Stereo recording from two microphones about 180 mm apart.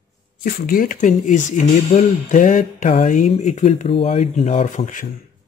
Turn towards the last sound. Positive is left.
turn(degrees=45)  # may be behind; listen again after turning